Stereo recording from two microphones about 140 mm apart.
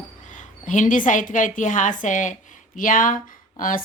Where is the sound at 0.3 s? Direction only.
65° left (ahead or behind).